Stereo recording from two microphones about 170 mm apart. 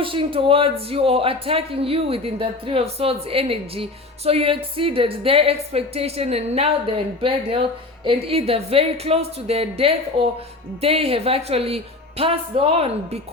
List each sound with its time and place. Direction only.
0.0 s speech: 30° right (ahead or behind)